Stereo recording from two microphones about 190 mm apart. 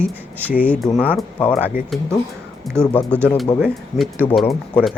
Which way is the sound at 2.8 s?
5° left (ahead or behind).